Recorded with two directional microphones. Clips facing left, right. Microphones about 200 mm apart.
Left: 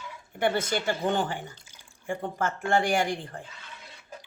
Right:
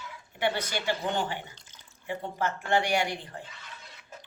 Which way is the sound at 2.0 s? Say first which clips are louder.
Left 2 dB; 50° left (ahead or behind).